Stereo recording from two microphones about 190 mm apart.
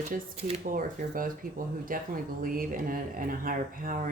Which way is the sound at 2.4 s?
45° right (ahead or behind).